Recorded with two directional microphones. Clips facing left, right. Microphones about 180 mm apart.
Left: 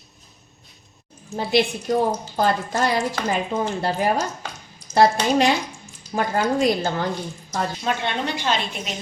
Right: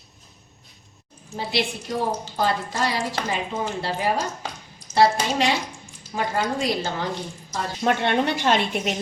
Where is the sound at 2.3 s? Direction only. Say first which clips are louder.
Left 3 dB; 50° left (ahead or behind).